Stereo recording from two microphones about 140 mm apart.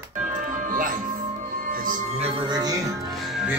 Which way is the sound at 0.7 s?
75° right (ahead or behind).